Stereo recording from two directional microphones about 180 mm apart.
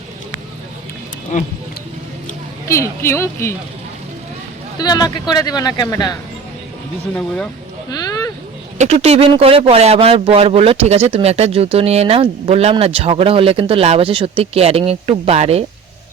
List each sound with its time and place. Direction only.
1.3 s speech: 45° left (ahead or behind)
2.6 s speech: 15° left (ahead or behind)
4.8 s speech: 20° left (ahead or behind)
7.9 s a sound: 20° left (ahead or behind)
8.8 s a man's voice: 35° right (ahead or behind)